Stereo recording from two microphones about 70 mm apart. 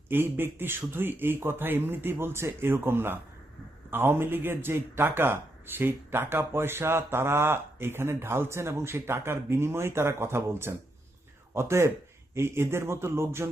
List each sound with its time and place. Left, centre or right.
0.1 s speech: right